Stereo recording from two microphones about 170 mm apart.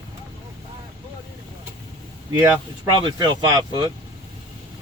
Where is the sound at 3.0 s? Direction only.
25° right (ahead or behind).